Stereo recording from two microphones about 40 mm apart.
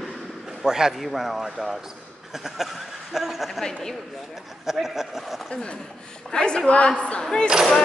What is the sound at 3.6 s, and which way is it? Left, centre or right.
Speech, centre.